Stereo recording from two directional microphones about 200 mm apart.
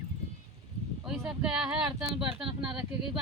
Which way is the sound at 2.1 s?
25° right (ahead or behind).